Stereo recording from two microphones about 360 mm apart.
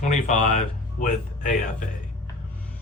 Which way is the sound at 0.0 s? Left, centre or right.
Centre.